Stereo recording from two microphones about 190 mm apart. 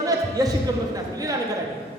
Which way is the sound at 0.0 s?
20° right (ahead or behind).